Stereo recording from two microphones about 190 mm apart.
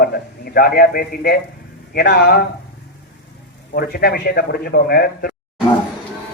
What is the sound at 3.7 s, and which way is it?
A man's voice, 55° left (ahead or behind).